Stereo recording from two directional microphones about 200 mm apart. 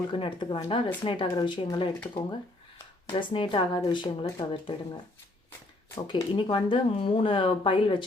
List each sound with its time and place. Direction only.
0.1 s speech: 25° left (ahead or behind)
6.1 s speech: 25° left (ahead or behind)